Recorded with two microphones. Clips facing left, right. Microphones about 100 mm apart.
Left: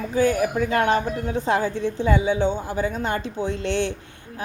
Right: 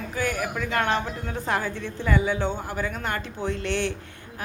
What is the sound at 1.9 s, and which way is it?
Speech, 20° left (ahead or behind).